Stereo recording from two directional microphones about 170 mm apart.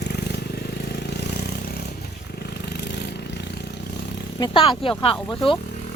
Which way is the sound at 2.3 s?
70° left (ahead or behind).